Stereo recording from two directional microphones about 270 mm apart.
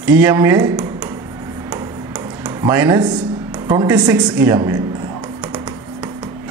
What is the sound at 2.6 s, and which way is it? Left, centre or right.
Speech, centre.